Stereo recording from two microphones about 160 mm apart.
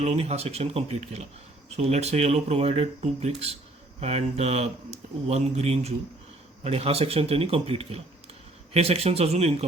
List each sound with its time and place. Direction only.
0.0 s speech: 40° right (ahead or behind)